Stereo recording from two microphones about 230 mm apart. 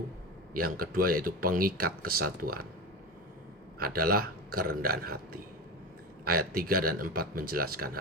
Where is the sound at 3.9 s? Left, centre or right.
Right.